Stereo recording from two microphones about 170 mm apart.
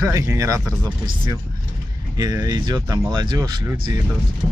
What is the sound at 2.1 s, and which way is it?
Speech, 25° right (ahead or behind).